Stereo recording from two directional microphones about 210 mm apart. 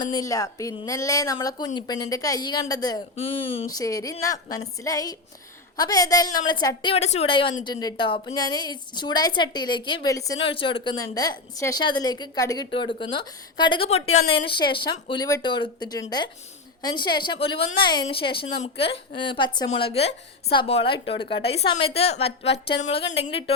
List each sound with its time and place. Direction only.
0.0 s a woman's voice: 15° left (ahead or behind)
22.4 s speech: 55° left (ahead or behind)
22.8 s a woman's voice: 25° left (ahead or behind)